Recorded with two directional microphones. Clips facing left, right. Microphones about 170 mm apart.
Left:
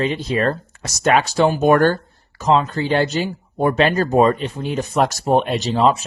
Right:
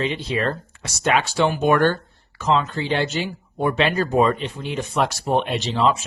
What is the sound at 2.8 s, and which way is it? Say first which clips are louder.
Speech: left 4 dB; 45° left (ahead or behind).